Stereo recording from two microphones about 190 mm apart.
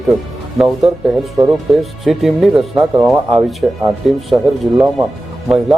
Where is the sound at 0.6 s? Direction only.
Centre (ahead or behind).